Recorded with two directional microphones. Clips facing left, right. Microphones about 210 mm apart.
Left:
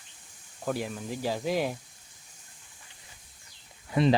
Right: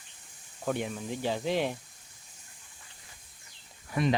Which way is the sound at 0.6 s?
Centre (ahead or behind).